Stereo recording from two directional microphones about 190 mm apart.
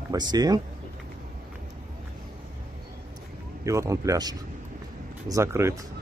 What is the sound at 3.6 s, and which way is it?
Speech, 15° right (ahead or behind).